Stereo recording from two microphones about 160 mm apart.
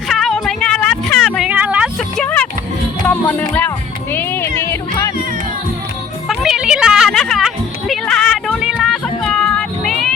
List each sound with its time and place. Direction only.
0.1 s music: centre (ahead or behind)
1.5 s a sound: 10° right (ahead or behind)
2.0 s vehicle: 5° left (ahead or behind)
3.1 s music: 10° left (ahead or behind)
6.2 s music: centre (ahead or behind)